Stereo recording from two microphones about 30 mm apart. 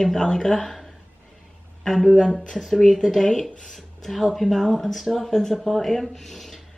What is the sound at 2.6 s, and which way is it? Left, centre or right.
Speech, centre.